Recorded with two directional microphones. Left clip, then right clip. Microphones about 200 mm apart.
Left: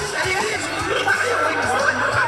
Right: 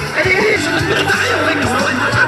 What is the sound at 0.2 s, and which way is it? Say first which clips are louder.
Music: right 10 dB; 20° right (ahead or behind).